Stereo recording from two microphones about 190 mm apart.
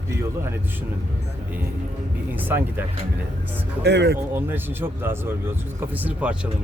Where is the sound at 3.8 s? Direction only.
65° right (ahead or behind).